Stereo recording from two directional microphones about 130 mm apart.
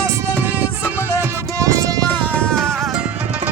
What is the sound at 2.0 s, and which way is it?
Music, 15° left (ahead or behind).